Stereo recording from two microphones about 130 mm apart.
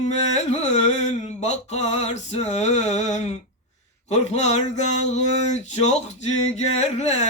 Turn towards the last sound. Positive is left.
turn(degrees=60)  # may be behind; listen again after turning